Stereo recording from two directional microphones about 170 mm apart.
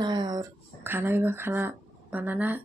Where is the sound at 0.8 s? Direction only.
15° right (ahead or behind).